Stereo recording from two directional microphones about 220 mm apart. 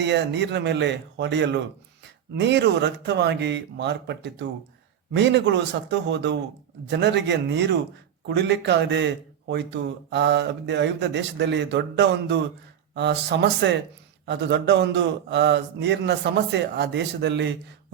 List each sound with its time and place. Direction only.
0.0 s a man's voice: 55° right (ahead or behind)